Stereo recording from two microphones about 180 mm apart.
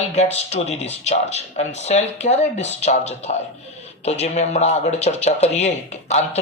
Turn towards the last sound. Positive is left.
turn(degrees=40)  # may be behind; listen again after turning